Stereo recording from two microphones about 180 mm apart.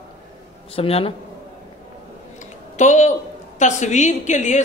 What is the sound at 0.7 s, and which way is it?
Speech, 30° left (ahead or behind).